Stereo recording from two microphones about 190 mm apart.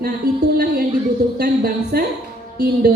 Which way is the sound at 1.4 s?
55° right (ahead or behind).